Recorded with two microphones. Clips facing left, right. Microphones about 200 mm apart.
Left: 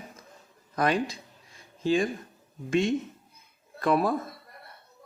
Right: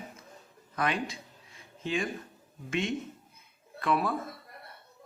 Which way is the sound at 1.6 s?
35° left (ahead or behind).